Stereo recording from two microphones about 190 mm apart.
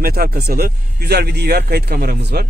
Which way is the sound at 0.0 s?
50° right (ahead or behind).